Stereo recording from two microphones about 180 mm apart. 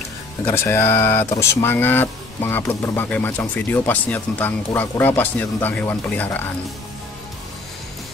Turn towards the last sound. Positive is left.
turn(degrees=10)  # may be behind; listen again after turning